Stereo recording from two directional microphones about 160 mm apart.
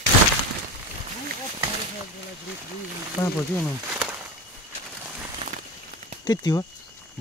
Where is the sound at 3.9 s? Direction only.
5° right (ahead or behind).